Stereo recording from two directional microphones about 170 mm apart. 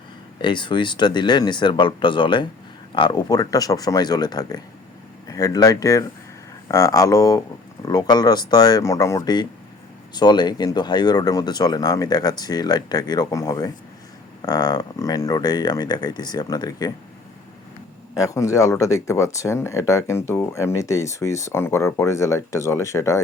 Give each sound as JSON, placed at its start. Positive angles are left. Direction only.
{"t": 0.4, "sound": "speech", "side_deg": 30}
{"t": 18.1, "sound": "speech", "side_deg": 20}